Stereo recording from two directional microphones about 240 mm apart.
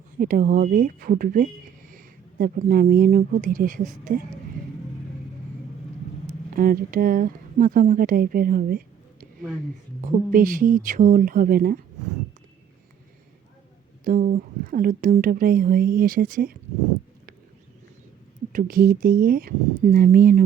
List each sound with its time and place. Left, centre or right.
0.2 s speech: right
6.2 s speech: right
10.0 s speech: right
14.0 s speech: right
18.5 s speech: right